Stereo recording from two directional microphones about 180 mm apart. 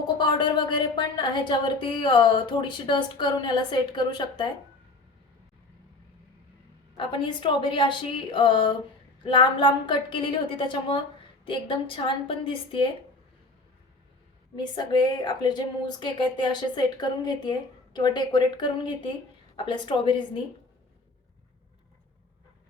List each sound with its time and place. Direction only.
0.2 s a woman's voice: 25° left (ahead or behind)
6.9 s a woman's voice: 25° left (ahead or behind)
14.5 s a woman's voice: 25° left (ahead or behind)